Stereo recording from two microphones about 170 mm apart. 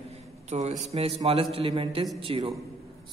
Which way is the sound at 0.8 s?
35° right (ahead or behind).